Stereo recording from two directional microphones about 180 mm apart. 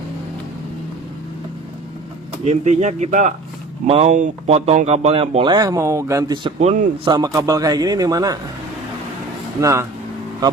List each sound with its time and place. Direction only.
2.4 s speech: 40° right (ahead or behind); by 6.5 s 25° right (ahead or behind)
6.6 s speech: 35° right (ahead or behind)
7.1 s a man's voice: 20° right (ahead or behind)
9.6 s speech: 15° right (ahead or behind)